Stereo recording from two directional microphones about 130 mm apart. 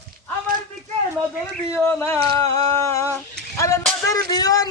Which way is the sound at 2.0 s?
25° left (ahead or behind).